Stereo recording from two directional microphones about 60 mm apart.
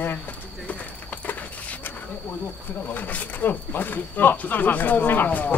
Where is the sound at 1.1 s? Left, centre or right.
Left.